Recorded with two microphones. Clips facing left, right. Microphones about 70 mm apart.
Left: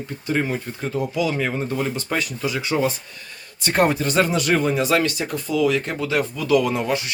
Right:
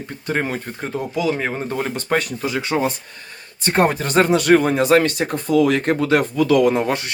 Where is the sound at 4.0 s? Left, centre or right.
Right.